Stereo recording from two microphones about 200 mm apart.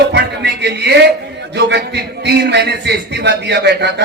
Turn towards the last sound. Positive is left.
turn(degrees=-55)  # may be behind; listen again after turning